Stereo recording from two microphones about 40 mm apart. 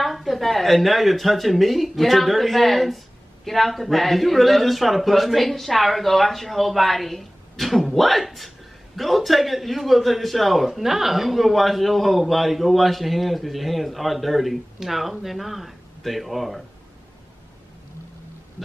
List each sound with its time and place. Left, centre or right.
0.0 s a man's voice: centre